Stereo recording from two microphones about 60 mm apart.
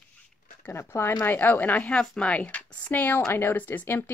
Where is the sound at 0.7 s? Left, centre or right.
Left.